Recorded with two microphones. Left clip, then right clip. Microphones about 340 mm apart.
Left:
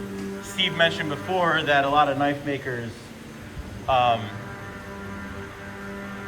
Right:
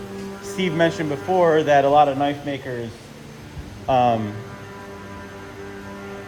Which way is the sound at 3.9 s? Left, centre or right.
Right.